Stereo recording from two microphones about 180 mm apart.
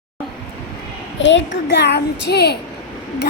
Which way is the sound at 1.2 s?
90° left.